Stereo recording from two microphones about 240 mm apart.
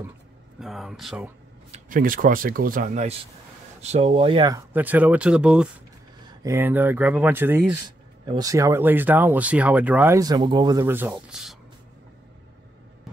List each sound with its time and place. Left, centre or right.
0.6 s speech: centre
1.7 s speech: right
4.7 s speech: centre